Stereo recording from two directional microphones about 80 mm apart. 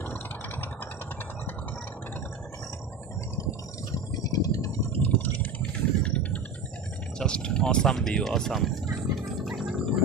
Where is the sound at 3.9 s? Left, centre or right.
Left.